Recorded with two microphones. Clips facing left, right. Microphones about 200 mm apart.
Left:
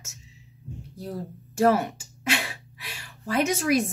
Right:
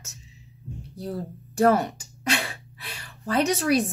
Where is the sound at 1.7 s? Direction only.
5° left (ahead or behind).